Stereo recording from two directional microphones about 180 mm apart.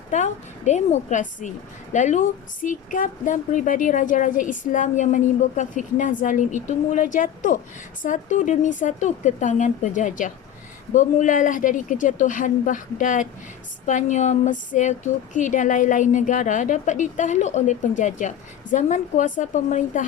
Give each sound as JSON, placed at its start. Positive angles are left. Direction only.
{"t": 0.1, "sound": "a woman's voice", "side_deg": 40}